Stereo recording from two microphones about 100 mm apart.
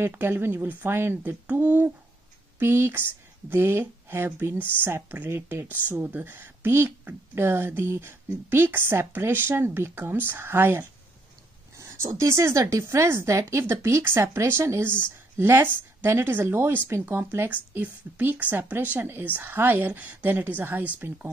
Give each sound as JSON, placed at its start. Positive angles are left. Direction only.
{"t": 0.0, "sound": "speech", "side_deg": -20}